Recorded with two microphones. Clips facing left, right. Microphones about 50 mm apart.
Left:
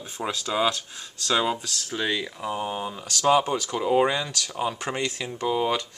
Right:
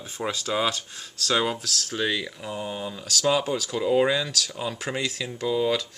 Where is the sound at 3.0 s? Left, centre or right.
Centre.